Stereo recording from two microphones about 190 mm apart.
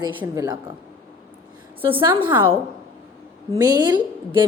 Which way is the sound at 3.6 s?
20° right (ahead or behind).